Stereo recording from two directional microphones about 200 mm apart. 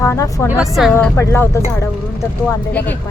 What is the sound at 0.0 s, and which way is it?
Speech, 15° left (ahead or behind).